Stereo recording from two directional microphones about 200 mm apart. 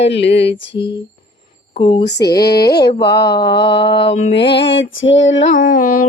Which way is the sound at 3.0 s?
20° left (ahead or behind).